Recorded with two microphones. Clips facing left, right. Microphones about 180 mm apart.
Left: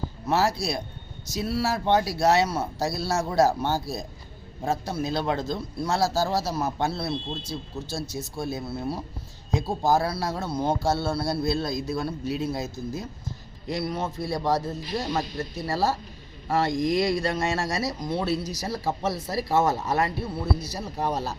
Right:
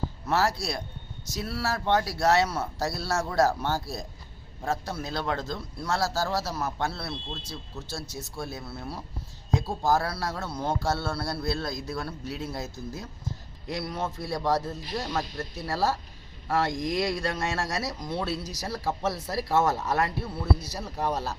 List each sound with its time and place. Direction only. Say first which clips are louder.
0.3 s speech: left 3 dB; 15° left (ahead or behind)
8.4 s speech: left 6 dB; 15° left (ahead or behind)